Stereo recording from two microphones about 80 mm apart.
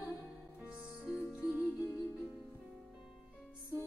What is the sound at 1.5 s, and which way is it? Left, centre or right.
Music, centre.